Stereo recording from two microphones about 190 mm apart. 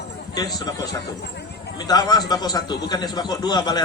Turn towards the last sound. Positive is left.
turn(degrees=20)  # may be behind; listen again after turning